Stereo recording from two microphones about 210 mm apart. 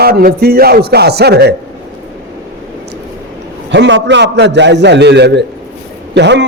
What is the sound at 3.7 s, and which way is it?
A man's voice, 60° right (ahead or behind).